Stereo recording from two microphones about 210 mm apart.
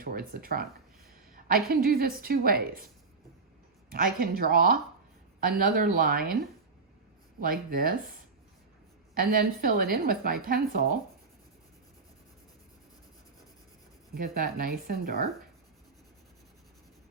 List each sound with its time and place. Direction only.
0.0 s a woman's voice: 45° right (ahead or behind)
3.8 s a woman's voice: 45° right (ahead or behind)
7.3 s a woman's voice: 45° right (ahead or behind)
9.1 s a woman's voice: 45° right (ahead or behind)
14.3 s a woman's voice: 45° right (ahead or behind)